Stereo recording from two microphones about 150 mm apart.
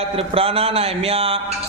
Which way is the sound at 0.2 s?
40° right (ahead or behind).